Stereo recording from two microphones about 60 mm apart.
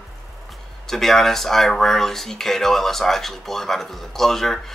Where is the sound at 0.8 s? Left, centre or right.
Centre.